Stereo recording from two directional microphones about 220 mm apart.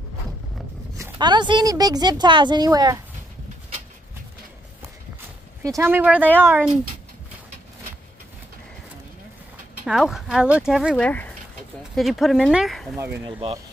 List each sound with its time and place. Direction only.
0.9 s speech: 15° right (ahead or behind)
5.6 s speech: 15° right (ahead or behind)
9.8 s speech: centre (ahead or behind)
13.2 s speech: 25° right (ahead or behind)